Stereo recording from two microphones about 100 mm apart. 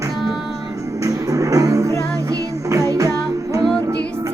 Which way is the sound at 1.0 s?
35° right (ahead or behind).